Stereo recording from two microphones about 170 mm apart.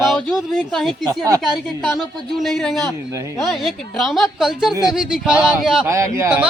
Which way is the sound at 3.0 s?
15° right (ahead or behind).